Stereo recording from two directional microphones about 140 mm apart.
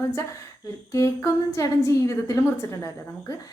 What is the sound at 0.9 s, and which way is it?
A woman's voice, 20° left (ahead or behind).